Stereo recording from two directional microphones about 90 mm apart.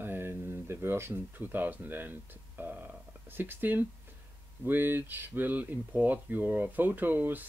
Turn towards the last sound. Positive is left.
turn(degrees=-20)  # may be behind; listen again after turning